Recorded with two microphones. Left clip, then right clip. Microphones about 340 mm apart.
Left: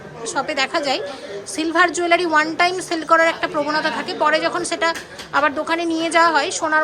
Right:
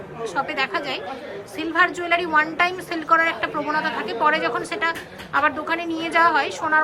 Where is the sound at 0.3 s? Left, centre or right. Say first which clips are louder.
Left 3 dB; centre.